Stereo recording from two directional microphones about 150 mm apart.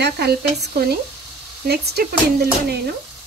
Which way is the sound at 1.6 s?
90° right.